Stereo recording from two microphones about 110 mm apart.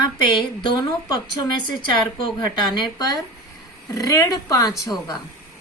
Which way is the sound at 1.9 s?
45° left (ahead or behind).